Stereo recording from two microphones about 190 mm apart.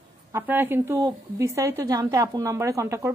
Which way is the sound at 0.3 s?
10° right (ahead or behind).